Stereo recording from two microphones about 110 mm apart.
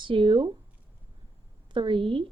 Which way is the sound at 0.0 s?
50° right (ahead or behind).